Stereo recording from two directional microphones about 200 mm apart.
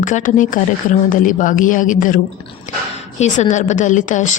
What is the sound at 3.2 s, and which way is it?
A woman's voice, 35° left (ahead or behind).